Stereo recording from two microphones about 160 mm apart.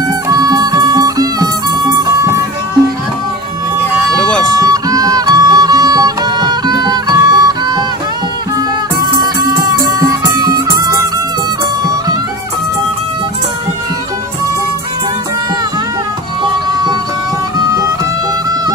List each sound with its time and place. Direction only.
0.3 s music: 25° right (ahead or behind)
4.2 s music: 5° left (ahead or behind)
4.6 s music: 20° right (ahead or behind)
9.0 s music: 25° right (ahead or behind)